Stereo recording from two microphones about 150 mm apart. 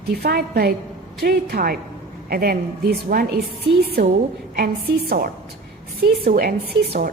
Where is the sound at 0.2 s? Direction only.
90° right.